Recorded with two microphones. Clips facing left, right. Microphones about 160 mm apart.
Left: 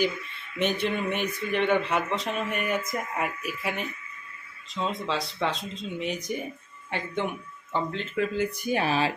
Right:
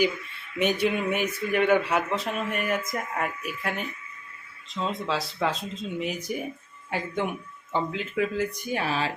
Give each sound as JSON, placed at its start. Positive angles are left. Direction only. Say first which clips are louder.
{"t": 0.6, "sound": "speech", "louder": "right 2 dB", "side_deg": -10}
{"t": 7.7, "sound": "speech", "louder": "right 1 dB", "side_deg": -5}
{"t": 8.7, "sound": "speech", "louder": "left 4 dB", "side_deg": 15}